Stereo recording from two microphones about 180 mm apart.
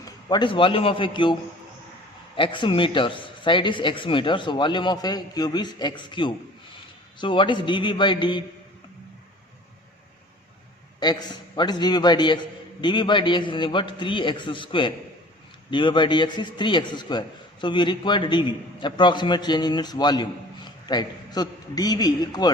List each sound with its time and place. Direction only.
0.0 s a man's voice: 25° left (ahead or behind)
11.0 s a man's voice: 25° left (ahead or behind)